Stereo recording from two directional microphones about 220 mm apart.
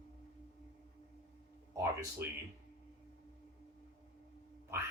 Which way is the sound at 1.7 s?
15° right (ahead or behind).